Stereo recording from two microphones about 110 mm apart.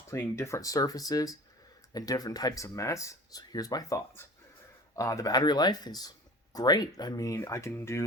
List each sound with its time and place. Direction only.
0.1 s speech: 25° left (ahead or behind)